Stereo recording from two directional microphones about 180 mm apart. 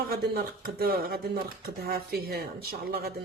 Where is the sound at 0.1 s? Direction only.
60° right (ahead or behind).